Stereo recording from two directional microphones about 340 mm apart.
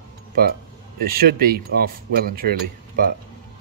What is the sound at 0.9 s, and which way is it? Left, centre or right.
Speech, right.